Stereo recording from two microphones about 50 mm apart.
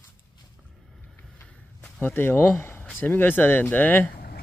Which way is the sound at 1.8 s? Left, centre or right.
Left.